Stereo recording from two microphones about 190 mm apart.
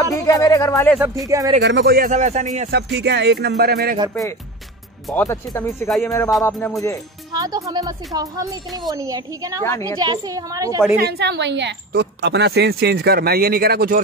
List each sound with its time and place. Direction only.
0.1 s speech: 20° left (ahead or behind)
0.9 s speech: 5° right (ahead or behind)
1.2 s a woman's voice: 20° right (ahead or behind)
1.6 s speech: 65° right (ahead or behind); by 2.7 s 40° right (ahead or behind)
2.7 s a woman's voice: 60° right (ahead or behind)
5.1 s speech: 10° left (ahead or behind)
5.9 s speech: centre (ahead or behind)
6.4 s speech: 15° left (ahead or behind)
7.3 s a woman's voice: 20° right (ahead or behind)
9.6 s speech: 15° left (ahead or behind)
9.9 s speech: 20° right (ahead or behind)
11.0 s a woman's voice: 60° right (ahead or behind)